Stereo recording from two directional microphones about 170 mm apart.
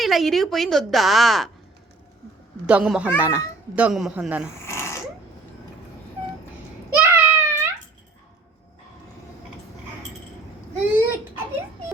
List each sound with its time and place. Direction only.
0.0 s a woman's voice: centre (ahead or behind)
2.6 s speech: 5° right (ahead or behind)
4.6 s a sound: 15° left (ahead or behind)
6.9 s child singing: 10° right (ahead or behind)
10.9 s baby cry: 10° right (ahead or behind)